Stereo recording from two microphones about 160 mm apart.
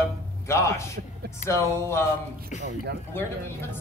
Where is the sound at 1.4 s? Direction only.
15° left (ahead or behind).